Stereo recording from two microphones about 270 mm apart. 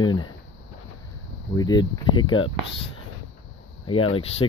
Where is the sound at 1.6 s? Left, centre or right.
Centre.